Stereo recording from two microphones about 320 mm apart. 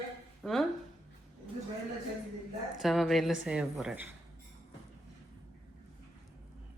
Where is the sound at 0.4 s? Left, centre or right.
Centre.